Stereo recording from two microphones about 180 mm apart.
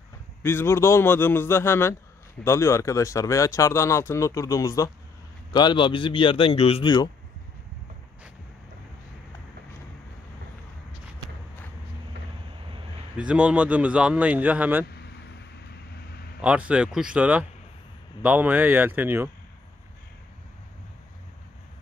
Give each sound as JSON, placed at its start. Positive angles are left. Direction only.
{"t": 0.4, "sound": "a man's voice", "side_deg": 15}
{"t": 13.2, "sound": "speech", "side_deg": -5}
{"t": 16.3, "sound": "speech", "side_deg": -5}